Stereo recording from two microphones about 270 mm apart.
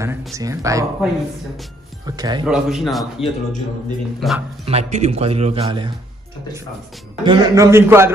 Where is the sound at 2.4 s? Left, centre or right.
Centre.